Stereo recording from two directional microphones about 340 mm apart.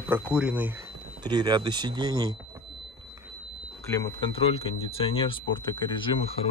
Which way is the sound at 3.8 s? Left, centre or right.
Centre.